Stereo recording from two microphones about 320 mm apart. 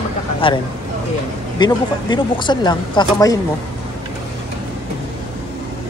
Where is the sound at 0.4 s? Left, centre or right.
Centre.